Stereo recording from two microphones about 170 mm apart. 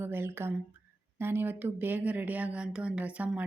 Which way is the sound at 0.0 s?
15° right (ahead or behind).